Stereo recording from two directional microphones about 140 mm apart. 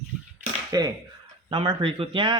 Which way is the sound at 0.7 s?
25° right (ahead or behind).